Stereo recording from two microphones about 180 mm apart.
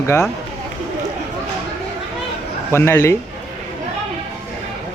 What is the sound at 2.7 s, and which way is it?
Speech, 15° left (ahead or behind).